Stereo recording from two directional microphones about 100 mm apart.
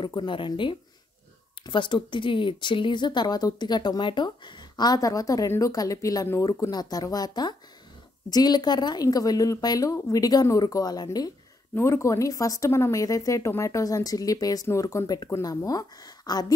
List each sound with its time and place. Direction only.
0.0 s a woman's voice: 50° left (ahead or behind)
6.2 s speech: 25° left (ahead or behind)
6.7 s a woman's voice: 40° left (ahead or behind)
11.7 s a woman's voice: 30° left (ahead or behind)